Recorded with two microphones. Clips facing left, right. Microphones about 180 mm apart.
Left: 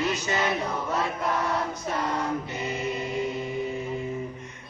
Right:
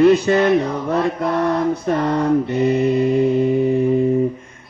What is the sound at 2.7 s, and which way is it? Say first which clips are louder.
Music: right 13 dB; 35° right (ahead or behind).